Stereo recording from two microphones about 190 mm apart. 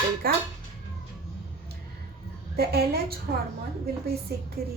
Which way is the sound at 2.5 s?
55° right (ahead or behind).